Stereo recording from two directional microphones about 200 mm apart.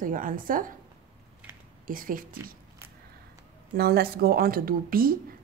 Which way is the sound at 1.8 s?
45° right (ahead or behind).